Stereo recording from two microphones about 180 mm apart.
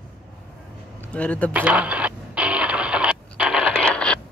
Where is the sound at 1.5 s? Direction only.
5° right (ahead or behind).